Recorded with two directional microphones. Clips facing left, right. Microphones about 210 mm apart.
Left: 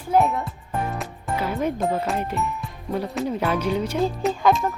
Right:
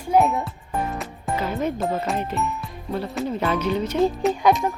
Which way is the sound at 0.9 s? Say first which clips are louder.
Right 1 dB; 10° left (ahead or behind).